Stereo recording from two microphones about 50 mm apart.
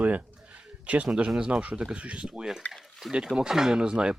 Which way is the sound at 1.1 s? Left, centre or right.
Centre.